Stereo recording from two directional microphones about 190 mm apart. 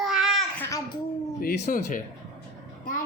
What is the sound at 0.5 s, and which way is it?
Speech, 10° left (ahead or behind).